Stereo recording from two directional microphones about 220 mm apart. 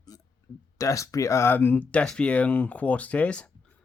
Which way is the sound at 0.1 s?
15° left (ahead or behind).